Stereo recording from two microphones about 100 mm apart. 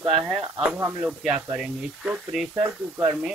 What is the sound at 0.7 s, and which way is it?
Speech, 20° right (ahead or behind).